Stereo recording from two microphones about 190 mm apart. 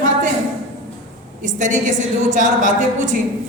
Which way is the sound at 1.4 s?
40° right (ahead or behind).